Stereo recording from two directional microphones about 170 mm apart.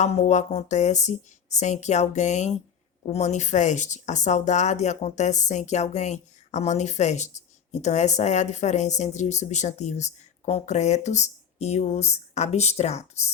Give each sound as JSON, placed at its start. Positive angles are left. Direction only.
{"t": 0.0, "sound": "speech", "side_deg": 40}